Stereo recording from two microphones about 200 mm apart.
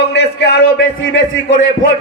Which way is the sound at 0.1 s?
60° left (ahead or behind).